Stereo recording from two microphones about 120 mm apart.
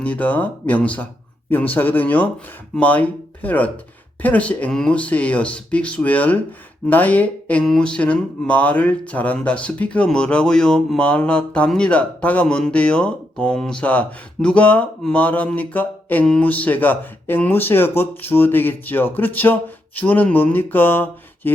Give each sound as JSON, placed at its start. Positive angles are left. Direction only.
{"t": 0.0, "sound": "speech", "side_deg": 10}